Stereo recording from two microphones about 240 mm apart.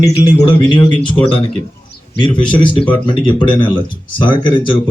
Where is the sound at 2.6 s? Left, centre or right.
Centre.